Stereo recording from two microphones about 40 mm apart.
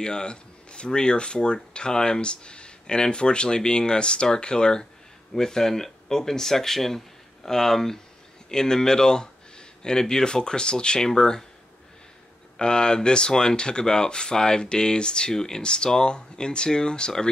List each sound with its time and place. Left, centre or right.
0.0 s speech: left
12.5 s speech: left